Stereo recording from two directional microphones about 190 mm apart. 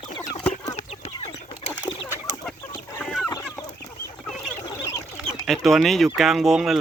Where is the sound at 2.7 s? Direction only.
10° left (ahead or behind).